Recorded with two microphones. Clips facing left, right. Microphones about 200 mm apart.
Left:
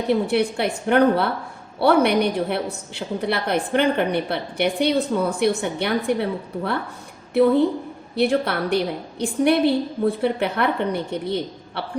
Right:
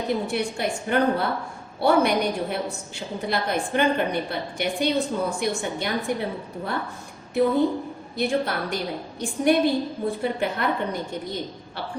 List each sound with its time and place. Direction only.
0.1 s a woman's voice: 65° left (ahead or behind)
8.1 s a woman's voice: 65° left (ahead or behind)